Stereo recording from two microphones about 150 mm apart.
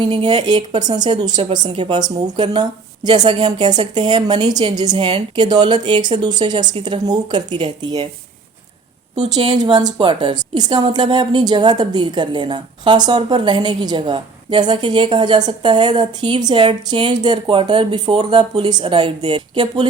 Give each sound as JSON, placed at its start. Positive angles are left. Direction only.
{"t": 0.0, "sound": "a woman's voice", "side_deg": -35}
{"t": 9.3, "sound": "a woman's voice", "side_deg": -25}